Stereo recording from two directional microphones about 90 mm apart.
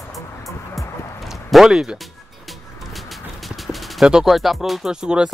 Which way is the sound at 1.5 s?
5° right (ahead or behind).